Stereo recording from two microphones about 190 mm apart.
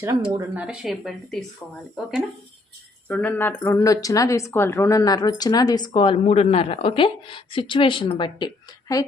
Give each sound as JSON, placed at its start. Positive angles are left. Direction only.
{"t": 0.0, "sound": "speech", "side_deg": -15}
{"t": 0.6, "sound": "speech", "side_deg": -5}
{"t": 3.1, "sound": "speech", "side_deg": 10}